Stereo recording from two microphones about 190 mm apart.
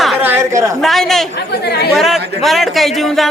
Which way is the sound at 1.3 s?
60° left (ahead or behind).